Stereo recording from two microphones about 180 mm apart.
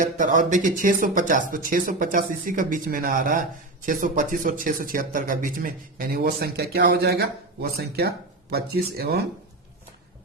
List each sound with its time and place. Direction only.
0.0 s speech: 45° right (ahead or behind); by 9.2 s 60° right (ahead or behind)